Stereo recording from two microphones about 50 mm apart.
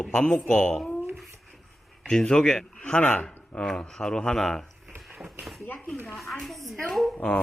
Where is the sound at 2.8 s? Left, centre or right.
Left; by 4.7 s centre.